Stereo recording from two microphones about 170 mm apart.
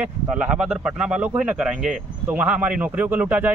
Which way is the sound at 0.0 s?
5° right (ahead or behind).